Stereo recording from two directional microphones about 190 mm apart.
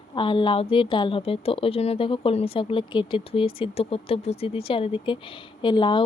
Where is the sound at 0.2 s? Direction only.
25° left (ahead or behind).